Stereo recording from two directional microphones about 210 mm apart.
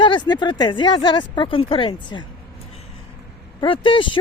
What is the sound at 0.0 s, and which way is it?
Speech, 20° left (ahead or behind).